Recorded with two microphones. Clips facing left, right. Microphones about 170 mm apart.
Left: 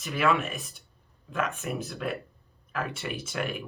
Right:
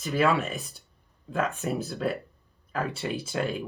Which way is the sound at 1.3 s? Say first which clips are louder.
Right 3 dB; 35° right (ahead or behind).